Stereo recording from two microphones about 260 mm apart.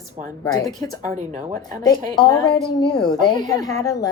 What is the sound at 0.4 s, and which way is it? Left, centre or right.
Speech, centre.